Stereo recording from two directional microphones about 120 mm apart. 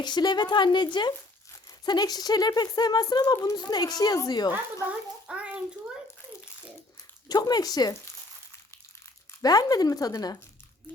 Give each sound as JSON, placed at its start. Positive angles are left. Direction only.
{"t": 0.0, "sound": "speech", "side_deg": 35}
{"t": 4.5, "sound": "a child's voice", "side_deg": -10}
{"t": 7.3, "sound": "speech", "side_deg": 35}
{"t": 9.4, "sound": "speech", "side_deg": 30}